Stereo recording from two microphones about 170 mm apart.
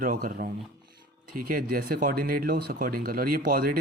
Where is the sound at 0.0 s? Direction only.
50° right (ahead or behind).